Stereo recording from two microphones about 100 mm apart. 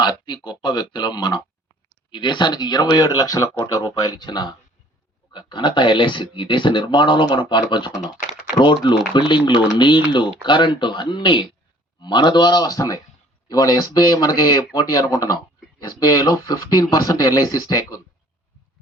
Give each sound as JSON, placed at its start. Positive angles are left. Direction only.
{"t": 0.0, "sound": "speech", "side_deg": 45}